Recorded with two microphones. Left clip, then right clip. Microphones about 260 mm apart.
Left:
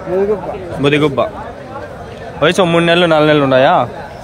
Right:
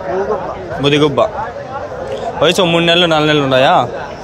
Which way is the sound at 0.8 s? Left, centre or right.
Centre.